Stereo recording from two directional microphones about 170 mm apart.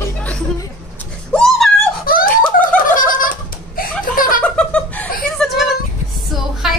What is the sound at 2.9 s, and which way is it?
Laughter, 55° left (ahead or behind).